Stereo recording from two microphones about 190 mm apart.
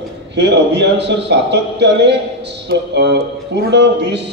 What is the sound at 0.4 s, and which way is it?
A man's voice, 65° right (ahead or behind).